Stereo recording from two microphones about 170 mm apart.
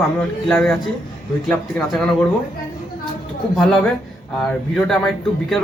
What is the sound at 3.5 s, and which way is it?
A man's voice, centre (ahead or behind).